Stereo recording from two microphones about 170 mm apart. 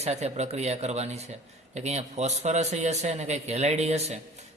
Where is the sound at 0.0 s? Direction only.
40° right (ahead or behind).